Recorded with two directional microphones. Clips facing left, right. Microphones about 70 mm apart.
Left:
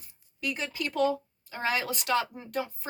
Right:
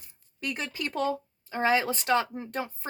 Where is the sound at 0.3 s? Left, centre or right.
Right.